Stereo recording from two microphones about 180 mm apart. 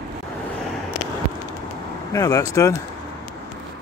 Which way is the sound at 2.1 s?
20° left (ahead or behind).